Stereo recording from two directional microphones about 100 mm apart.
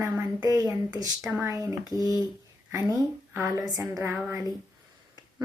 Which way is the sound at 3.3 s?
35° right (ahead or behind).